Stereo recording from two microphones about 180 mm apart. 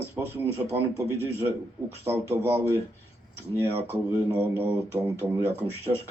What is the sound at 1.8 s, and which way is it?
A man's voice, 15° right (ahead or behind).